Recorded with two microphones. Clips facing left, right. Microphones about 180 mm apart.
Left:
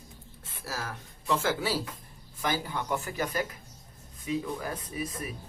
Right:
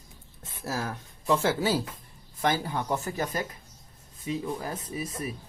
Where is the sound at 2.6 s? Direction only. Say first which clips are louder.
Right 3 dB; 30° right (ahead or behind).